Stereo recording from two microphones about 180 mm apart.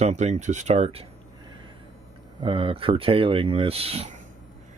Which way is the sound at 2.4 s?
30° right (ahead or behind).